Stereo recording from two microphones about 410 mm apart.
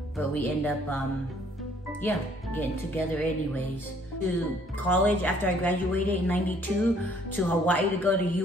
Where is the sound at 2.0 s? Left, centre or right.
Centre.